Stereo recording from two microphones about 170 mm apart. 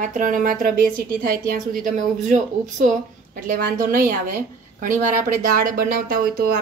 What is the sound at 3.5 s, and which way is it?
Speech, 55° right (ahead or behind).